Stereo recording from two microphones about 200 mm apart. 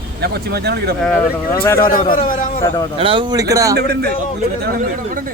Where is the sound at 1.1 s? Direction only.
10° left (ahead or behind).